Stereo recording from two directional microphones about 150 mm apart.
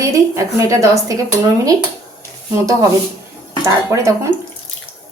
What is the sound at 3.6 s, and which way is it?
Speech, 20° right (ahead or behind).